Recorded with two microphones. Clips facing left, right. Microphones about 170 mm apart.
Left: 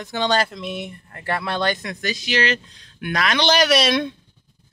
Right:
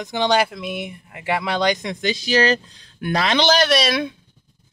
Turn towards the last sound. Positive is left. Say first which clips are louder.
# left 1 dB
turn(degrees=-5)  # may be behind; listen again after turning